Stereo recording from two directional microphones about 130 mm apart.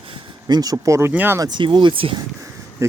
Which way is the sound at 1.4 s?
35° right (ahead or behind).